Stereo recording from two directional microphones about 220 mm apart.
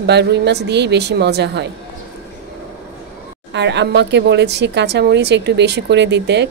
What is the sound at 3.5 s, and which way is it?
A woman's voice, 50° right (ahead or behind).